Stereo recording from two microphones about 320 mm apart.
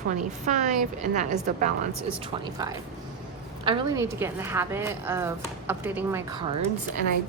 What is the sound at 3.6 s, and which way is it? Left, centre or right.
A woman's voice, centre.